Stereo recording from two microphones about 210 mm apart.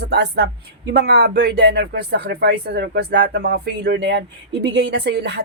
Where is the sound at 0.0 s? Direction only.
50° right (ahead or behind).